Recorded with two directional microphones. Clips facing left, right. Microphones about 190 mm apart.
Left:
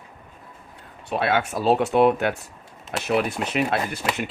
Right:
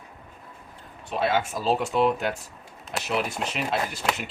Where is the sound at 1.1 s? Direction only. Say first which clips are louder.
Left 2 dB; 65° left (ahead or behind).